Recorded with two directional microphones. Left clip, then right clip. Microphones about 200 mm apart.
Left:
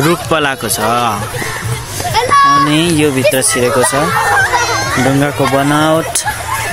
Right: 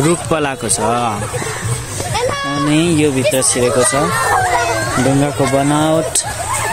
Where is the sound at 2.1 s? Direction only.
45° left (ahead or behind).